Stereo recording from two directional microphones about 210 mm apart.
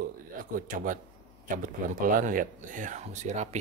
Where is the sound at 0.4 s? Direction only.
40° right (ahead or behind).